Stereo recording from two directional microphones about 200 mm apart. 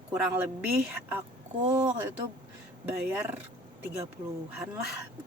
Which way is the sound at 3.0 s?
10° right (ahead or behind).